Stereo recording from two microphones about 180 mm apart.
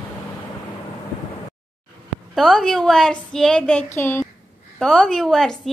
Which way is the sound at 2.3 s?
Centre (ahead or behind).